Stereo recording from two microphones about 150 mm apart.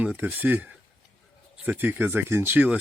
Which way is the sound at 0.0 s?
10° right (ahead or behind).